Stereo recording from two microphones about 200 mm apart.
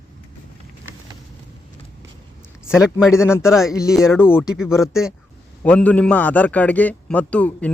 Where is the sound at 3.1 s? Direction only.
15° left (ahead or behind).